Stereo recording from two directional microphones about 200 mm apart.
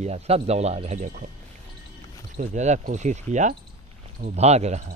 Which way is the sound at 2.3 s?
35° right (ahead or behind).